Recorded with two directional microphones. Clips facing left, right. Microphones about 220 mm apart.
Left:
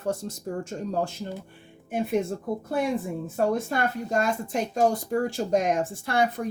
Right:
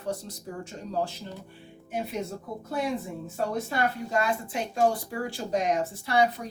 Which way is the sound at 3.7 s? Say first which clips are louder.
Left 2 dB; 45° left (ahead or behind).